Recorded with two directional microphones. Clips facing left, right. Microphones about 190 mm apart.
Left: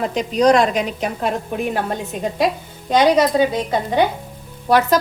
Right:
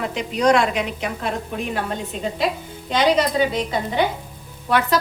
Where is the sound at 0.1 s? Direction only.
35° left (ahead or behind).